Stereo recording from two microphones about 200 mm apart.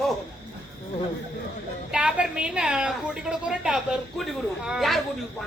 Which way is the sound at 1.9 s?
5° right (ahead or behind).